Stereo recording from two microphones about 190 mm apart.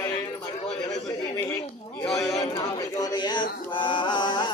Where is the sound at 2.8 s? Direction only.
20° left (ahead or behind).